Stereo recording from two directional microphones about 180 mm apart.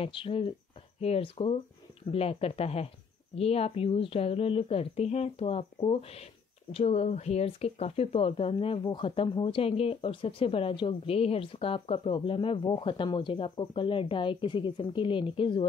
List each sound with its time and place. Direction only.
0.0 s speech: 30° left (ahead or behind)